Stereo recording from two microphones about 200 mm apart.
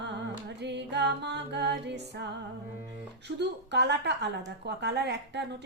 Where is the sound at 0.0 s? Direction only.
60° right (ahead or behind).